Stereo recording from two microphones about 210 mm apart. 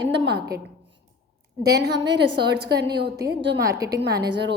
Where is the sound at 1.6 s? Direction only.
50° right (ahead or behind).